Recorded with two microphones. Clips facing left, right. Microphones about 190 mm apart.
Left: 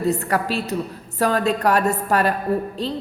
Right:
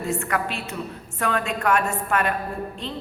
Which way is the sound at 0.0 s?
35° left (ahead or behind).